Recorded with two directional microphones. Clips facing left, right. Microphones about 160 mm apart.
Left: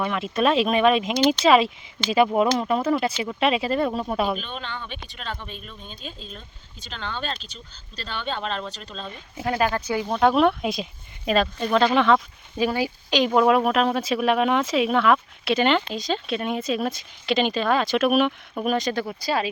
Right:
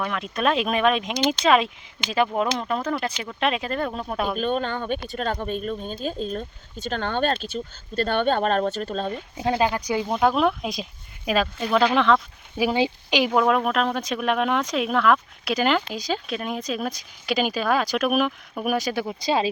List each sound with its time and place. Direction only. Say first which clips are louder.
0.0 s speech: left 2 dB; centre (ahead or behind)
4.4 s speech: right 9 dB; 45° right (ahead or behind)
9.4 s speech: right 1 dB; 20° right (ahead or behind)
10.2 s speech: left 3 dB; centre (ahead or behind)
12.7 s speech: right 1 dB; 15° right (ahead or behind)
13.3 s speech: left 3 dB; 5° left (ahead or behind)
19.0 s speech: right 2 dB; 20° right (ahead or behind)